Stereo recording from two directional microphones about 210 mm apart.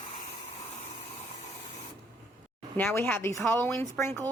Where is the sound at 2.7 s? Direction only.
10° left (ahead or behind).